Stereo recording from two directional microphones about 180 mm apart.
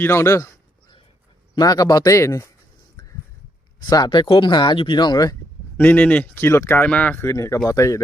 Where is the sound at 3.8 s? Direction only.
25° left (ahead or behind).